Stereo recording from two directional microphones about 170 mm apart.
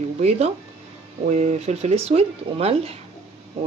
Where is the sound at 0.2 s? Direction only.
40° right (ahead or behind).